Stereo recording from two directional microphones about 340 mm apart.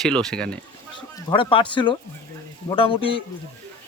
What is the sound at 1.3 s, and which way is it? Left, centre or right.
Speech, centre.